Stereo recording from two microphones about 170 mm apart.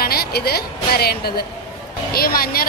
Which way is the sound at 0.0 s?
65° left (ahead or behind).